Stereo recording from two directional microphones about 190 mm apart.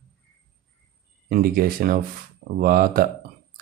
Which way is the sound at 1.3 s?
50° right (ahead or behind).